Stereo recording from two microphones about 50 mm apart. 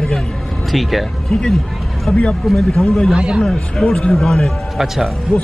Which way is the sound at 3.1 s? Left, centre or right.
Centre.